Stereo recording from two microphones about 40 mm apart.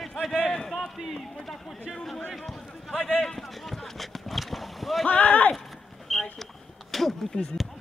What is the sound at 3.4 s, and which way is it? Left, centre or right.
Boat, centre.